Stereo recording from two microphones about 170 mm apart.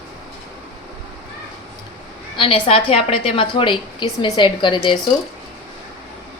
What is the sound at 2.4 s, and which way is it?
A woman's voice, 30° left (ahead or behind).